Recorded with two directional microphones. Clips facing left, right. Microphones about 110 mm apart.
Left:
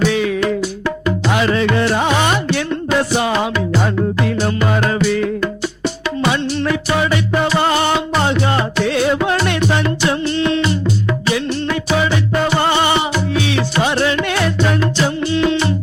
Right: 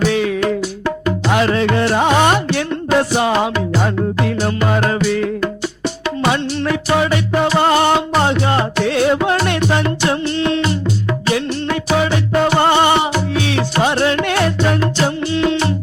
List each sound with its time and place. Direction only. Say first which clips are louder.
0.0 s music: even; 50° right (ahead or behind)
8.7 s music: right 1 dB; 50° right (ahead or behind)